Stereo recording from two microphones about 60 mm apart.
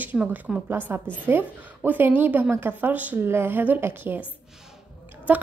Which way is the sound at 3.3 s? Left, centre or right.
Right.